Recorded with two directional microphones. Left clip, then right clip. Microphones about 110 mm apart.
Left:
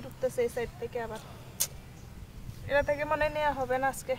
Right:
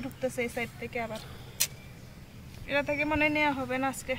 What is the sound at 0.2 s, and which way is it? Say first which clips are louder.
Speech: left 2 dB; 40° left (ahead or behind).